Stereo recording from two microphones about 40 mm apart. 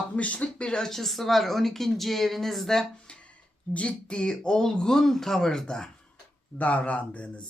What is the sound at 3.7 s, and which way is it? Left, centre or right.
Speech, left.